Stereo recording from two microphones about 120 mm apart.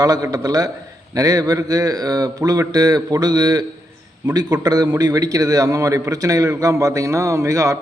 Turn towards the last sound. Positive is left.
turn(degrees=-25)  # may be behind; listen again after turning